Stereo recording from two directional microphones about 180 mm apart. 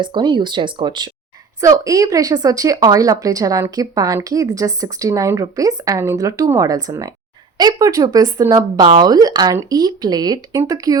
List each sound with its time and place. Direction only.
0.0 s speech: 25° right (ahead or behind)